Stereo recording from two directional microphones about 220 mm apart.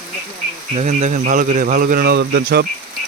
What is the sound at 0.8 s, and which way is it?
Speech, 30° right (ahead or behind).